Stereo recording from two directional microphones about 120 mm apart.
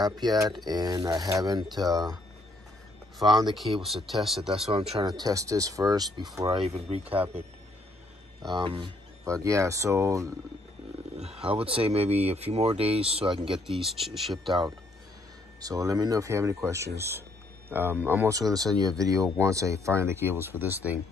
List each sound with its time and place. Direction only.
0.0 s speech: 35° right (ahead or behind)
3.8 s speech: centre (ahead or behind)
4.6 s speech: 55° right (ahead or behind)
5.0 s speech: 35° right (ahead or behind)
6.5 s speech: 55° right (ahead or behind)
8.5 s speech: 45° right (ahead or behind)
9.2 s speech: 25° right (ahead or behind)
11.1 s speech: 55° right (ahead or behind)
13.5 s speech: centre (ahead or behind)
15.6 s speech: 30° right (ahead or behind)
18.3 s speech: 30° right (ahead or behind); by 21.0 s 15° right (ahead or behind)